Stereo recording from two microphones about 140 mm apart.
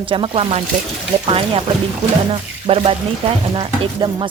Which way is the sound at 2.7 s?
40° right (ahead or behind).